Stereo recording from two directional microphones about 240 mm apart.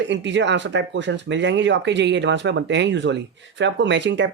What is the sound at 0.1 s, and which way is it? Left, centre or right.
Speech, right.